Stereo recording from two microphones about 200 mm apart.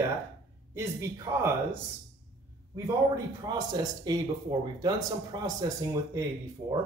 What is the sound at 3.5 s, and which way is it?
Speech, 20° right (ahead or behind).